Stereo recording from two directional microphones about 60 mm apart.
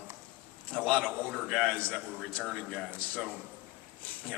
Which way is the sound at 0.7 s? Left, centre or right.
Centre.